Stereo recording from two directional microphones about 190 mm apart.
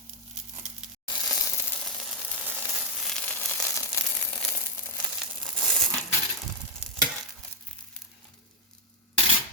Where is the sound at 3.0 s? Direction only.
5° left (ahead or behind).